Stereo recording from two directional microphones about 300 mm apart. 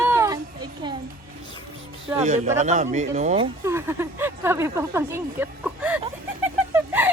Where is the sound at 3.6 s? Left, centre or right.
Centre.